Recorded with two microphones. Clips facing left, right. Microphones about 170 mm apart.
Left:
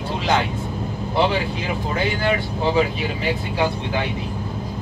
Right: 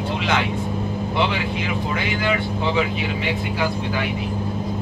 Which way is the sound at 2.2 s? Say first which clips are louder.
Right 1 dB; 40° left (ahead or behind).